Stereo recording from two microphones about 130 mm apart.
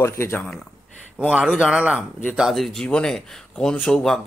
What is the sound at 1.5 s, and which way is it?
Speech, 5° right (ahead or behind).